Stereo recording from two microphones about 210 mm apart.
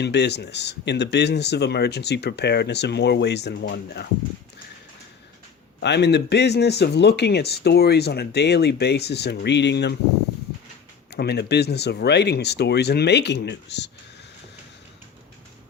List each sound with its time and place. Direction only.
0.0 s speech: 55° left (ahead or behind)
5.8 s speech: 55° left (ahead or behind)
11.1 s speech: 50° left (ahead or behind)